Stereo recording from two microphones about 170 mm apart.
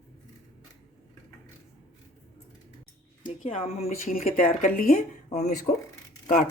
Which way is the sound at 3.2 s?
50° left (ahead or behind).